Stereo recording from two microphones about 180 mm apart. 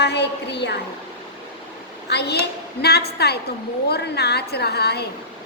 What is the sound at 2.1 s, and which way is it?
A woman's voice, 65° left (ahead or behind).